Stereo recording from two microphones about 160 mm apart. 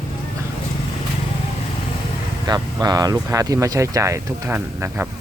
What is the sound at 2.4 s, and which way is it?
Speech, 25° right (ahead or behind).